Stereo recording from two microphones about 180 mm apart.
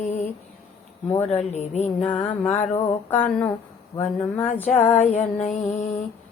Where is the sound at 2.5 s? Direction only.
40° left (ahead or behind).